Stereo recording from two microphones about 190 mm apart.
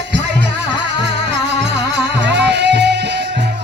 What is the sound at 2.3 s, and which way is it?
Music, 65° right (ahead or behind).